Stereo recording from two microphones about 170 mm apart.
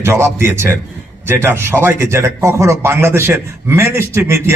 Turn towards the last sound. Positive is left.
turn(degrees=-15)  # may be behind; listen again after turning